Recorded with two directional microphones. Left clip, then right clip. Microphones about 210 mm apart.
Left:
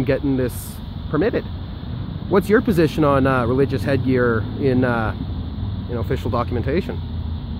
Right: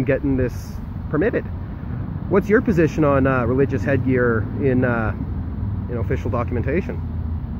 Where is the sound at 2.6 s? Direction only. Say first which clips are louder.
Left 1 dB; 20° left (ahead or behind).